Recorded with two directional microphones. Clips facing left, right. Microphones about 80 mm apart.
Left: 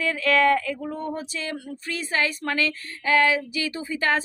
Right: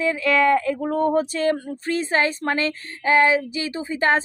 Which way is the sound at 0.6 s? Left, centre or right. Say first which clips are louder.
Right 6 dB; right.